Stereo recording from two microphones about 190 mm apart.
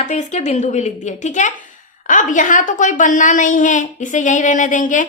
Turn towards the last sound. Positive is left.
turn(degrees=45)  # may be behind; listen again after turning